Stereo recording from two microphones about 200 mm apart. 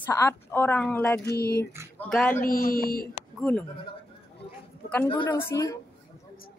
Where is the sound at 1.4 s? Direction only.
50° left (ahead or behind).